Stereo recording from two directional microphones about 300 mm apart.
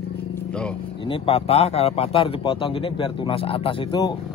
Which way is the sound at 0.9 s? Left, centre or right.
Centre.